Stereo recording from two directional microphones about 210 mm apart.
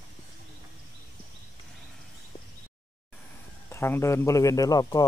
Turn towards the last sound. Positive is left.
turn(degrees=20)  # may be behind; listen again after turning